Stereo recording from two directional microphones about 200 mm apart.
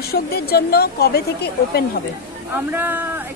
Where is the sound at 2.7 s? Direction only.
10° right (ahead or behind).